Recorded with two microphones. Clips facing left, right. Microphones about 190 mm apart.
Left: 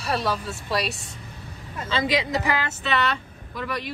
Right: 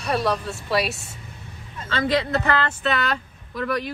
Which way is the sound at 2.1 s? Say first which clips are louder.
Right 5 dB; 15° left (ahead or behind).